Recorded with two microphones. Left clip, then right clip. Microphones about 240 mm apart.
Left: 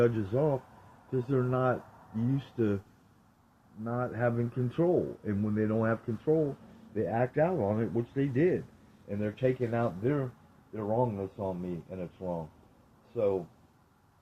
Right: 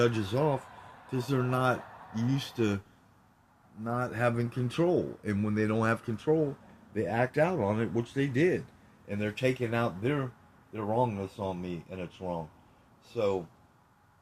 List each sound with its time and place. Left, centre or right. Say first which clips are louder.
0.0 s speech: even; right
3.8 s speech: right 1 dB; right